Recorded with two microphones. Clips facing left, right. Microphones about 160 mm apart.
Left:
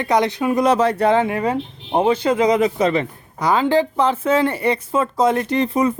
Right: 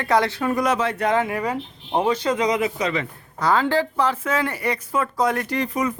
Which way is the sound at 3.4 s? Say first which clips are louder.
Left 3 dB; 15° left (ahead or behind).